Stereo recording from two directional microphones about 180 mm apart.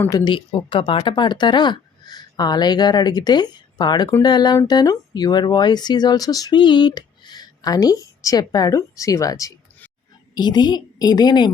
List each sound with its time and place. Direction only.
0.3 s speech: 30° left (ahead or behind)